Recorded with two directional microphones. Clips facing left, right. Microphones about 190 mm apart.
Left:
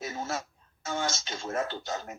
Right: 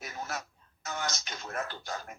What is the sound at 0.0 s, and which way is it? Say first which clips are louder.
Speech: left 5 dB; 25° left (ahead or behind).